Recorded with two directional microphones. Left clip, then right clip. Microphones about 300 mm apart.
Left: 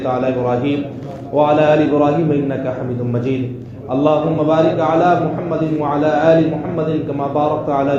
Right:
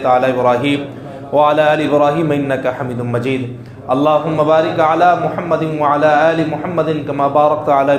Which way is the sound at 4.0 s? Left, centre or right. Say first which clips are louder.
Right 1 dB; right.